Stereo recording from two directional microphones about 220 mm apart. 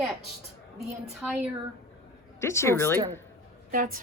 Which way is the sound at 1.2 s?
5° right (ahead or behind).